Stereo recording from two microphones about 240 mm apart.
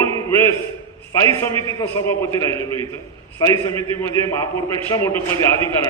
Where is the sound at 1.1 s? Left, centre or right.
Centre.